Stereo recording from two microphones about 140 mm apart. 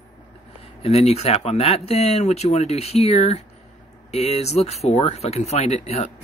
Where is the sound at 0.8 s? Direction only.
45° left (ahead or behind).